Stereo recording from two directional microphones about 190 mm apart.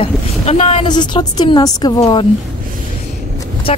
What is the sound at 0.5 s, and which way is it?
A woman's voice, 30° left (ahead or behind).